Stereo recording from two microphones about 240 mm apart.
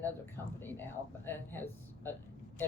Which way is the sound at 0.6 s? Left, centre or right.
Centre.